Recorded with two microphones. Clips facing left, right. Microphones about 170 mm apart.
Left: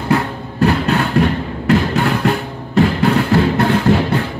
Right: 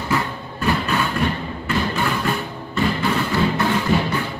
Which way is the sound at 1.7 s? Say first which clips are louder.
Left 7 dB; 70° left (ahead or behind).